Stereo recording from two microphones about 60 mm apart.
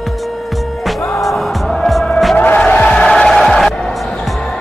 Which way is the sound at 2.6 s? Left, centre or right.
Left.